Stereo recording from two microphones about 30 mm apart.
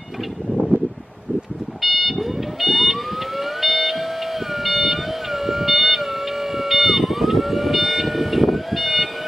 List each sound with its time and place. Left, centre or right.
1.8 s emergency vehicle: centre
4.6 s music: centre